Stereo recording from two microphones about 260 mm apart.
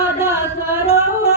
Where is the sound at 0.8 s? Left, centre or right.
Left.